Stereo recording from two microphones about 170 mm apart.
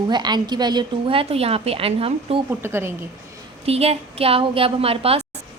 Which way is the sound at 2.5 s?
15° right (ahead or behind).